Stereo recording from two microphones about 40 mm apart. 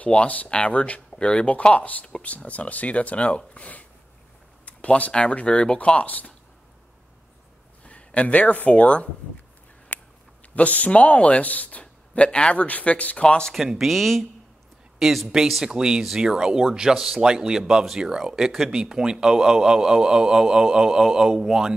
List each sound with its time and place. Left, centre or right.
0.0 s speech: left
4.6 s a sound: left
5.5 s speech: left
7.8 s a sound: left
8.6 s speech: left
9.9 s a sound: left
10.5 s speech: left
11.5 s speech: left
11.8 s a man's voice: left
12.6 s speech: left
13.2 s speech: left
13.6 s speech: centre
15.6 s speech: centre